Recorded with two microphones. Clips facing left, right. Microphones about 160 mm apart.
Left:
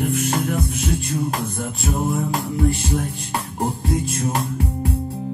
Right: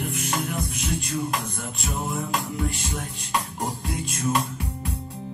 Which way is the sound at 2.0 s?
50° left (ahead or behind).